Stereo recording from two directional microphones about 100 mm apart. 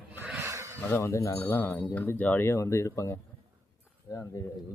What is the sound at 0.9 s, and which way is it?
Speech, 25° left (ahead or behind).